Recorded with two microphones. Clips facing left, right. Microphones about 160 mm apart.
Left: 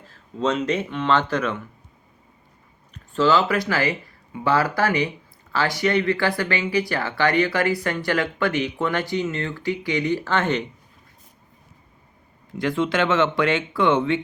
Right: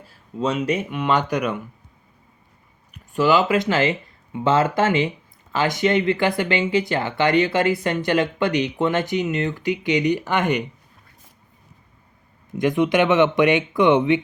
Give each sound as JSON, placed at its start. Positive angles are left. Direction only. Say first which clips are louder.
{"t": 0.0, "sound": "speech", "louder": "even", "side_deg": -10}
{"t": 2.9, "sound": "speech", "louder": "right 1 dB", "side_deg": -15}
{"t": 12.5, "sound": "speech", "louder": "right 4 dB", "side_deg": -20}